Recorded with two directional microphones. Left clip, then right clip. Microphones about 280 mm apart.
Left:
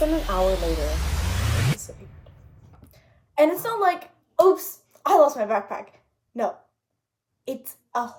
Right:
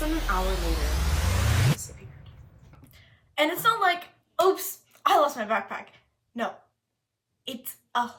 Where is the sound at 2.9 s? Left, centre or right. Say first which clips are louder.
Left 5 dB; right.